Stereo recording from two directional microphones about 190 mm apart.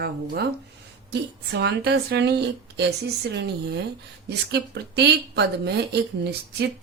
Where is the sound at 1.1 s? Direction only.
65° right (ahead or behind).